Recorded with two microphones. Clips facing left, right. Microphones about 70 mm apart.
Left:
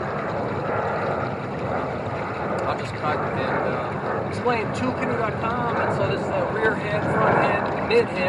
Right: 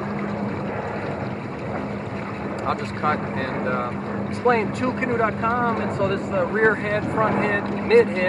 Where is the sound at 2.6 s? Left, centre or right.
Right.